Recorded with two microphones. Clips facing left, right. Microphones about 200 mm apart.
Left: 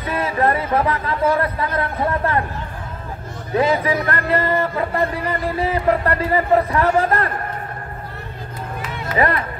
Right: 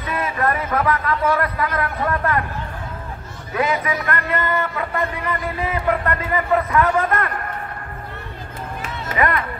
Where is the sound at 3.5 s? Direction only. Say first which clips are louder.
Left 4 dB; 30° left (ahead or behind).